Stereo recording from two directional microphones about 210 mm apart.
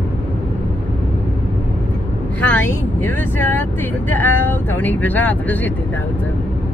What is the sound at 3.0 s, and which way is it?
Speech, 10° left (ahead or behind).